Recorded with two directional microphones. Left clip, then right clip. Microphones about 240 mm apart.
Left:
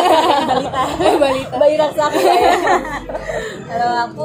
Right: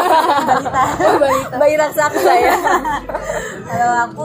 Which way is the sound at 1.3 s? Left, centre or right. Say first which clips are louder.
Even; right.